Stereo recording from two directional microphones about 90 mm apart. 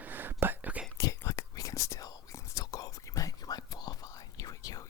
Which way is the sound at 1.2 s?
30° left (ahead or behind).